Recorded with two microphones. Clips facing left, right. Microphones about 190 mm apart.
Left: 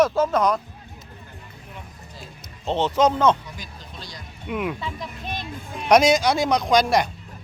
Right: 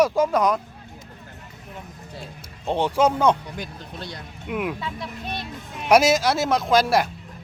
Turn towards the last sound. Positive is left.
turn(degrees=-5)  # may be behind; listen again after turning